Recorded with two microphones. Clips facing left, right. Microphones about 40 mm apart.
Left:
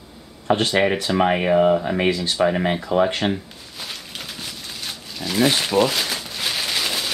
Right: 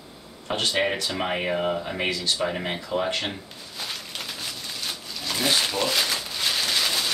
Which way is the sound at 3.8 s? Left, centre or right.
Centre.